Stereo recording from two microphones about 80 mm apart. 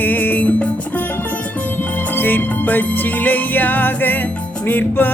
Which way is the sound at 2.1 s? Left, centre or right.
Left.